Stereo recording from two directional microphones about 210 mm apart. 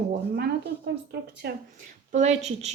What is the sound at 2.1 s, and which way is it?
Speech, 35° right (ahead or behind).